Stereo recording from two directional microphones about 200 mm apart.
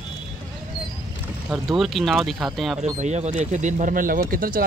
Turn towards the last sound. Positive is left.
turn(degrees=-45)  # may be behind; listen again after turning